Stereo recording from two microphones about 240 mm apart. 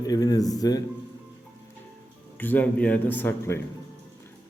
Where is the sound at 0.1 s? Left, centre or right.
Centre.